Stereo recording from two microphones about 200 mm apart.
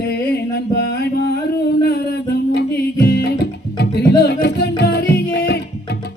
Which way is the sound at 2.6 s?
55° left (ahead or behind).